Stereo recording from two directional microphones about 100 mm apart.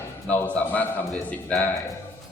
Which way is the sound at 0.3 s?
15° left (ahead or behind).